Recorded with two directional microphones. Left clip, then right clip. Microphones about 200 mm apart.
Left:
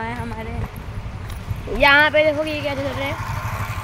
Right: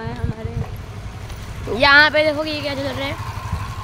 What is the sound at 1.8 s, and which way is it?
Speech, 10° right (ahead or behind).